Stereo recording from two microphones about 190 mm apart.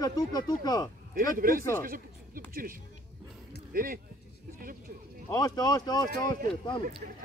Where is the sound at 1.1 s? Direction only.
50° right (ahead or behind).